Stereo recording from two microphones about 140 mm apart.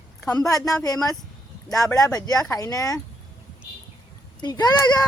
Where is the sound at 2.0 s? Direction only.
25° left (ahead or behind).